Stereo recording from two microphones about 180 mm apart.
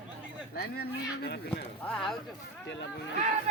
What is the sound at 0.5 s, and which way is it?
Speech, 60° left (ahead or behind).